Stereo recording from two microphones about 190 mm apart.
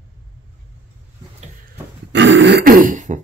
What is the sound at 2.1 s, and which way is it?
Throat clearing, 75° right (ahead or behind).